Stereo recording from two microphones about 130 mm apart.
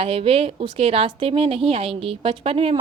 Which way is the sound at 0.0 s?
45° right (ahead or behind).